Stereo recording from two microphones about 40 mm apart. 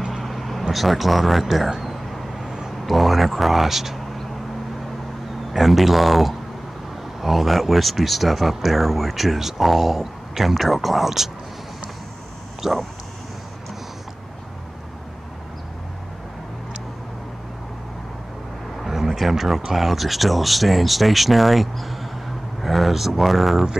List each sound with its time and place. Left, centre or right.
0.1 s vehicle: centre
2.9 s speech: centre
5.5 s speech: centre
12.6 s speech: centre
18.8 s a sound: centre
19.6 s speech: centre